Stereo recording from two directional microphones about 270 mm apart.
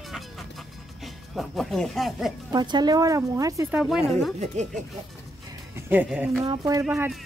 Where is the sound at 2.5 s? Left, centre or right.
Centre.